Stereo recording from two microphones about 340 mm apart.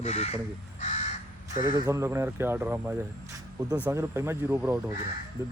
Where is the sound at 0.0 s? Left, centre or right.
Centre.